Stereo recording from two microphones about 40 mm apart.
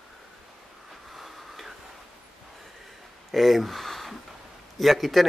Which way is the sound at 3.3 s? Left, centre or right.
Centre.